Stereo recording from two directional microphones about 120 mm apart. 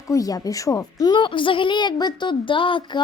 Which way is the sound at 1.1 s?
45° left (ahead or behind).